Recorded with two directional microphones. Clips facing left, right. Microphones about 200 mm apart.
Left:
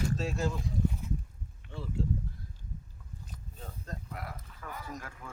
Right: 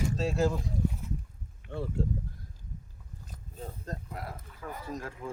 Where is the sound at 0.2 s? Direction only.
30° right (ahead or behind).